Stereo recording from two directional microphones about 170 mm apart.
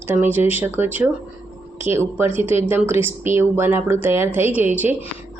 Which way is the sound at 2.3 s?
35° left (ahead or behind).